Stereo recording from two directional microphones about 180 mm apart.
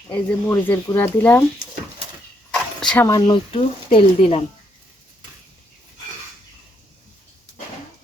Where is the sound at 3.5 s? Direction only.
30° left (ahead or behind).